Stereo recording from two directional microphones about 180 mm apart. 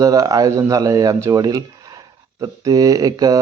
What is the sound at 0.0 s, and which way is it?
A man's voice, 20° right (ahead or behind).